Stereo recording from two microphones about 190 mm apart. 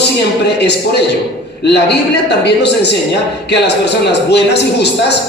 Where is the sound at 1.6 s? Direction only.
65° left (ahead or behind).